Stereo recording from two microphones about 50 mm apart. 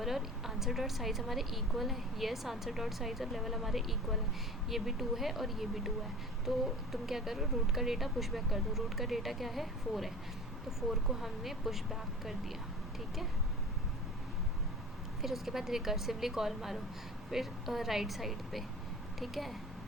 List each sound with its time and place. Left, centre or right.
0.0 s speech: centre
15.2 s a woman's voice: centre